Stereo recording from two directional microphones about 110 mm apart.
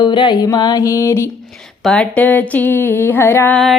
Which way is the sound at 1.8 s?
5° left (ahead or behind).